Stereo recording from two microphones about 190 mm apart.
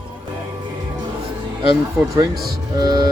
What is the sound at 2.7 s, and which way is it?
Music, 20° right (ahead or behind).